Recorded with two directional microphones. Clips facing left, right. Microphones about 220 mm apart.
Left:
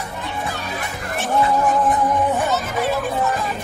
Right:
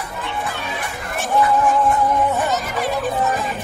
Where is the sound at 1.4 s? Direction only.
15° left (ahead or behind).